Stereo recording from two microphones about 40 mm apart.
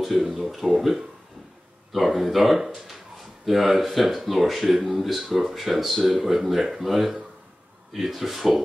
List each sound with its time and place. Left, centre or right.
0.2 s speech: centre